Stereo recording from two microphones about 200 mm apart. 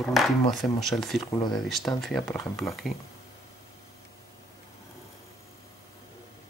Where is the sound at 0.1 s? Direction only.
Centre (ahead or behind).